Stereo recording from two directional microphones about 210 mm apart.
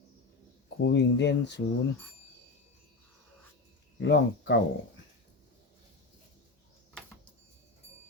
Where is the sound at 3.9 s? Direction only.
55° left (ahead or behind).